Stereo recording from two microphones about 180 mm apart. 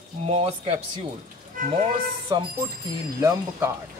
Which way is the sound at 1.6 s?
50° right (ahead or behind).